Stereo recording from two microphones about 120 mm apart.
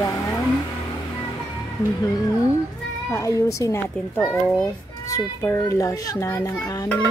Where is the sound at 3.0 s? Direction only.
25° left (ahead or behind).